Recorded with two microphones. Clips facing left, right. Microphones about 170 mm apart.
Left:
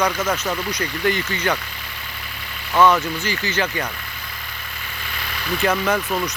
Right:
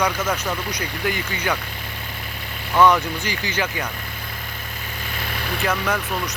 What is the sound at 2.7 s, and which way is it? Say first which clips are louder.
Speech: even; 15° right (ahead or behind).